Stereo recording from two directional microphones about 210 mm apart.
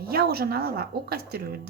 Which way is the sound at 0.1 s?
45° right (ahead or behind).